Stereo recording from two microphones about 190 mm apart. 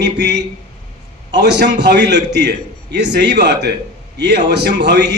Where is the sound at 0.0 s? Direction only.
65° right (ahead or behind).